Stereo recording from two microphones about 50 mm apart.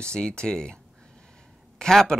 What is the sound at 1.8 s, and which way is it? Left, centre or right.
Speech, centre.